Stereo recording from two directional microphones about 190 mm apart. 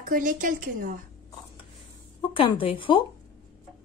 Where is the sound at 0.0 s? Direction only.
45° right (ahead or behind).